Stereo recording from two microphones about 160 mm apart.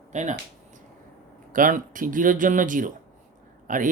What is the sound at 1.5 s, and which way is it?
Speech, 55° right (ahead or behind).